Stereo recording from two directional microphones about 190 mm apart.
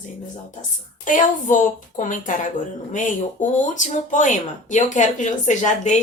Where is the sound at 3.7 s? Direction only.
40° left (ahead or behind).